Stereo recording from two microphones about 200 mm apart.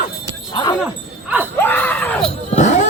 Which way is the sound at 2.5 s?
35° left (ahead or behind).